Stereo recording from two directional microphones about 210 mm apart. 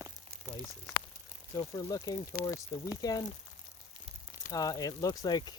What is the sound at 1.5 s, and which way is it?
Speech, 15° left (ahead or behind).